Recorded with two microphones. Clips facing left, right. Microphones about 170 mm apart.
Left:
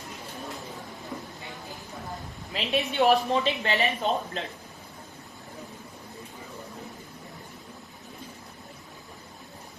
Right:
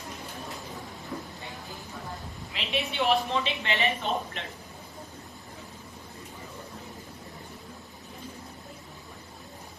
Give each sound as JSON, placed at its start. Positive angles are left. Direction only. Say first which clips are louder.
{"t": 2.5, "sound": "speech", "louder": "left 4 dB", "side_deg": 40}